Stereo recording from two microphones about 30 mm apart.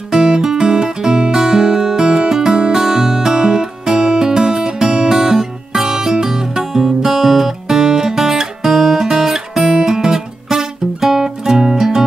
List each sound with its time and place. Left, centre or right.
0.1 s music: centre
7.1 s music: centre